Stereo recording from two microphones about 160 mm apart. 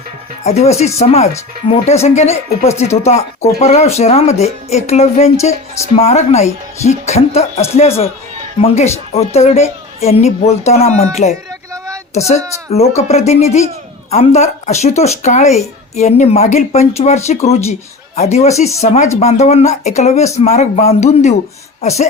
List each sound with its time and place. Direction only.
0.4 s a woman's voice: 40° left (ahead or behind)
13.0 s a woman's voice: 45° left (ahead or behind)